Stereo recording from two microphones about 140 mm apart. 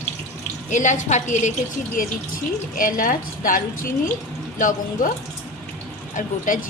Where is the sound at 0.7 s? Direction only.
60° left (ahead or behind).